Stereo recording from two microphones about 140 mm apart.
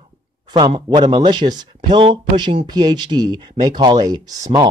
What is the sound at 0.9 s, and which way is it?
Speech, 35° right (ahead or behind).